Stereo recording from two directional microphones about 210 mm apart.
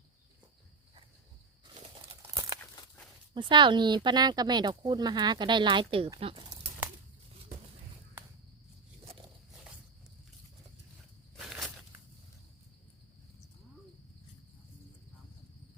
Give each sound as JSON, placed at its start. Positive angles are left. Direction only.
{"t": 1.7, "sound": "tearing", "side_deg": -25}
{"t": 2.2, "sound": "crumpling", "side_deg": -15}
{"t": 2.6, "sound": "crumpling", "side_deg": 10}
{"t": 3.3, "sound": "speech", "side_deg": -20}
{"t": 11.3, "sound": "a sound", "side_deg": 0}